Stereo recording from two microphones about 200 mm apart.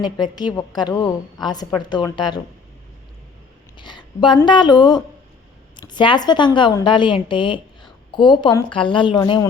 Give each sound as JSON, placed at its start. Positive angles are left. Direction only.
{"t": 0.0, "sound": "a woman's voice", "side_deg": 20}
{"t": 3.8, "sound": "a sound", "side_deg": 25}
{"t": 4.4, "sound": "a woman's voice", "side_deg": 25}